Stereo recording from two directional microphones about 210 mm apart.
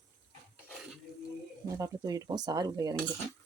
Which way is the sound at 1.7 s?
15° right (ahead or behind).